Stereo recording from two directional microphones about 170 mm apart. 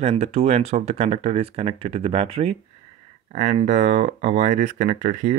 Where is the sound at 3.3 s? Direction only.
45° right (ahead or behind).